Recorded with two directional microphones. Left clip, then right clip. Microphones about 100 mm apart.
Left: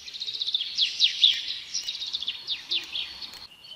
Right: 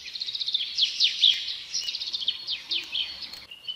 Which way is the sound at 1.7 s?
35° left (ahead or behind).